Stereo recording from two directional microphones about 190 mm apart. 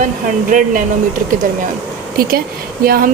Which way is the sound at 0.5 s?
45° right (ahead or behind).